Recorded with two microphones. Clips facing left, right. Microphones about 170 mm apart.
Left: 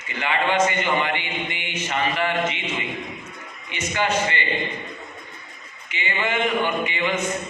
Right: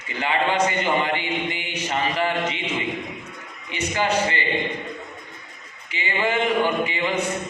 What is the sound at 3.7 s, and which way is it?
Speech, 35° right (ahead or behind).